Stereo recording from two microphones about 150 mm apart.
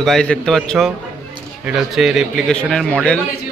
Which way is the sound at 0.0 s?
5° left (ahead or behind).